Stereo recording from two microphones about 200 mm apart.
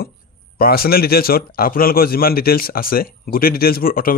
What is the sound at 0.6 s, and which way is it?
Speech, 50° left (ahead or behind).